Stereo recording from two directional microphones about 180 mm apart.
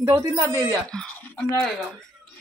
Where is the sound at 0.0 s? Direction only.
20° right (ahead or behind).